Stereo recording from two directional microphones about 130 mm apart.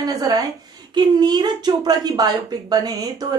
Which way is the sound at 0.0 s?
30° right (ahead or behind).